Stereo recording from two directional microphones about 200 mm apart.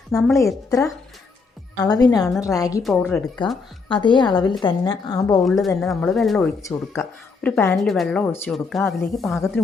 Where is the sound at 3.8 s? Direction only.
25° left (ahead or behind).